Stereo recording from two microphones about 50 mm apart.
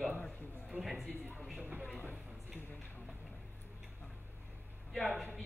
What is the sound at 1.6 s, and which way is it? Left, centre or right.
Speech, right.